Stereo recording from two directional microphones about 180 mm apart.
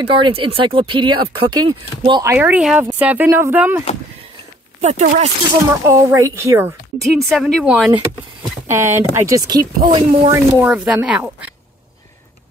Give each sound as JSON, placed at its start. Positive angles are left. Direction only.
{"t": 0.1, "sound": "speech", "side_deg": -30}
{"t": 2.3, "sound": "speech", "side_deg": -5}
{"t": 4.8, "sound": "speech", "side_deg": -40}
{"t": 5.9, "sound": "speech", "side_deg": -15}
{"t": 7.0, "sound": "speech", "side_deg": 0}
{"t": 8.6, "sound": "speech", "side_deg": -15}
{"t": 10.3, "sound": "speech", "side_deg": -10}